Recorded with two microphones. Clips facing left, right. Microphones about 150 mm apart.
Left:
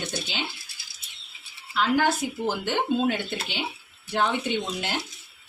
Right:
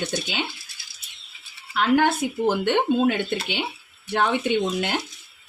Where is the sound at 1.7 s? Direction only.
60° right (ahead or behind).